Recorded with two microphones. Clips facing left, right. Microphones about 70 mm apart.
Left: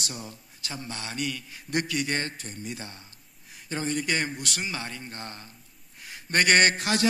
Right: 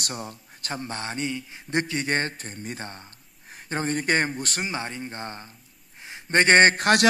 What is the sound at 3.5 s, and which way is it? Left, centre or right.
A man's voice, right.